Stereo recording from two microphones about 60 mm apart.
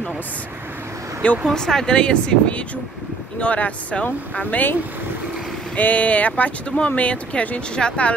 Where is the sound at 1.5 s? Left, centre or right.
Centre; by 4.7 s left.